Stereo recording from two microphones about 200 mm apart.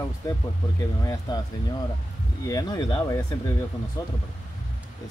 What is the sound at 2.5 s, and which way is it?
Speech, 20° left (ahead or behind).